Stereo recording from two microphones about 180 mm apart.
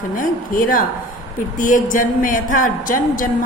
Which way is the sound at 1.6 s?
45° left (ahead or behind).